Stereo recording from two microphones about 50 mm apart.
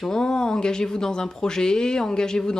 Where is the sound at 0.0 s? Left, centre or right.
Centre.